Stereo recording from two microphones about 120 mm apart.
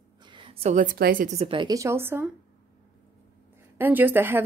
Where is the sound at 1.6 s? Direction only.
25° right (ahead or behind).